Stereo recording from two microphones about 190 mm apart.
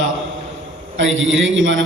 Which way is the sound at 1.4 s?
85° right.